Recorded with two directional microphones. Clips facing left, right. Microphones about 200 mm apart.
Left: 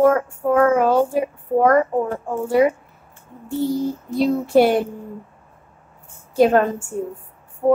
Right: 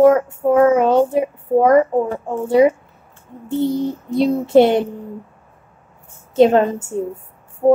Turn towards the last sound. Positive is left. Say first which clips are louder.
# right 3 dB
turn(degrees=-20)  # may be behind; listen again after turning